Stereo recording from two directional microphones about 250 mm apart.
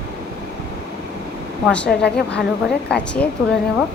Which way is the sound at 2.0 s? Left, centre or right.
Left.